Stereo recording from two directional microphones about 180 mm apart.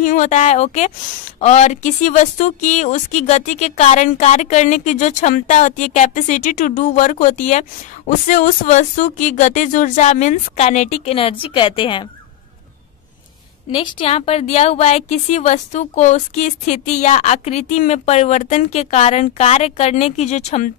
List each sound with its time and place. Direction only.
0.0 s a woman's voice: 45° left (ahead or behind); by 12.1 s 25° left (ahead or behind)
13.7 s a woman's voice: 30° left (ahead or behind)